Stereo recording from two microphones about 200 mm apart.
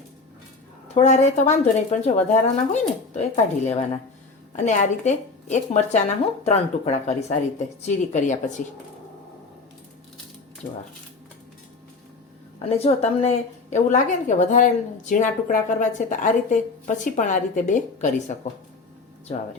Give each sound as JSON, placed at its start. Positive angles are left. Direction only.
{"t": 0.9, "sound": "a woman's voice", "side_deg": 35}
{"t": 12.6, "sound": "a woman's voice", "side_deg": 30}